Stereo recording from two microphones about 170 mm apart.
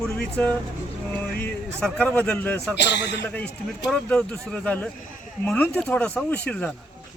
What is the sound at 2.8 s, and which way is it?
Speech, 85° left.